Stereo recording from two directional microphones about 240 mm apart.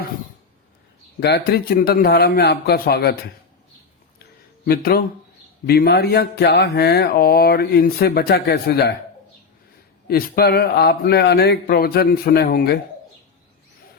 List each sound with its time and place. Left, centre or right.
1.2 s speech: left
4.2 s a sound: left
5.6 s speech: left
10.1 s speech: left